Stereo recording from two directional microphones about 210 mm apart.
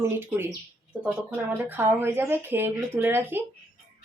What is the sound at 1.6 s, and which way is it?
Speech, 10° right (ahead or behind).